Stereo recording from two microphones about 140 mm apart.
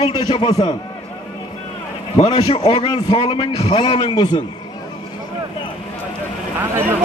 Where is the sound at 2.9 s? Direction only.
30° left (ahead or behind).